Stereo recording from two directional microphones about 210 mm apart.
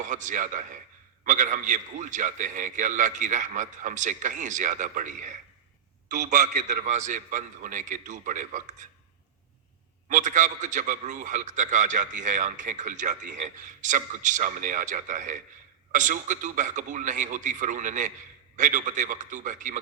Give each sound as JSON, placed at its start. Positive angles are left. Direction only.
{"t": 0.0, "sound": "a man's voice", "side_deg": -35}
{"t": 10.1, "sound": "a man's voice", "side_deg": -35}